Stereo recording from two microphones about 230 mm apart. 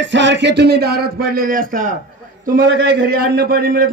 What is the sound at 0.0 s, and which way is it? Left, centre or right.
A man's voice, right.